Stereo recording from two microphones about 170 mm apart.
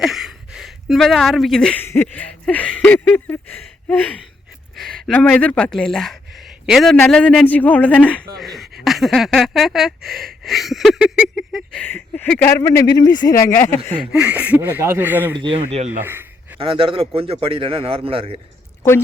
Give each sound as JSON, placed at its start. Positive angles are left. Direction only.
{"t": 0.0, "sound": "speech", "side_deg": 0}
{"t": 3.6, "sound": "a sound", "side_deg": 10}
{"t": 4.8, "sound": "a man's voice", "side_deg": 0}
{"t": 13.6, "sound": "a man's voice", "side_deg": 15}
{"t": 14.0, "sound": "speech", "side_deg": -5}
{"t": 15.4, "sound": "speech", "side_deg": -35}
{"t": 16.0, "sound": "a sound", "side_deg": -10}
{"t": 16.6, "sound": "speech", "side_deg": -30}
{"t": 18.8, "sound": "a woman's voice", "side_deg": 15}